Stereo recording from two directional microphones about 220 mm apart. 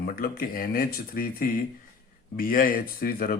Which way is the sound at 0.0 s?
40° left (ahead or behind).